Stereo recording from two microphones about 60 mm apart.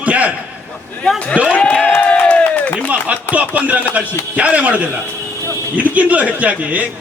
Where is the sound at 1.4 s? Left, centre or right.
Right.